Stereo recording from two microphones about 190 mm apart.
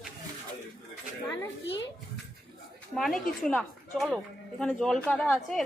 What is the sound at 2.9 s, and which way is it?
A woman's voice, centre (ahead or behind).